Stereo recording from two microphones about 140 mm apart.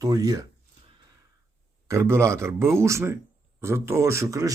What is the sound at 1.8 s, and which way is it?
Speech, 20° right (ahead or behind).